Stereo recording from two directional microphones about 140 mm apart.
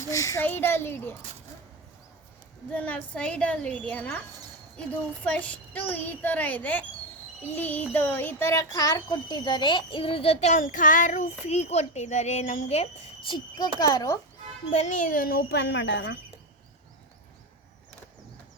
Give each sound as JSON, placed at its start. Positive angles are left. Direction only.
{"t": 0.0, "sound": "a woman's voice", "side_deg": 20}
{"t": 2.7, "sound": "a woman's voice", "side_deg": 10}
{"t": 10.6, "sound": "child singing", "side_deg": 70}
{"t": 13.7, "sound": "a child's voice", "side_deg": 25}
{"t": 14.7, "sound": "a child's voice", "side_deg": 55}